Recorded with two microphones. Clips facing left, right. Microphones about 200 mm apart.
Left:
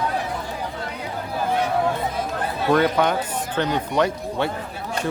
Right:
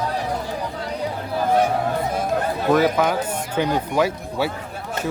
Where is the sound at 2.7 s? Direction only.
5° right (ahead or behind).